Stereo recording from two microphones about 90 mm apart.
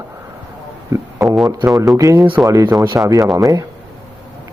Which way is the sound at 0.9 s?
35° right (ahead or behind).